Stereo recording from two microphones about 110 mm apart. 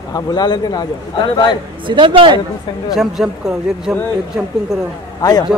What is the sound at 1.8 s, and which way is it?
Speech, 45° right (ahead or behind).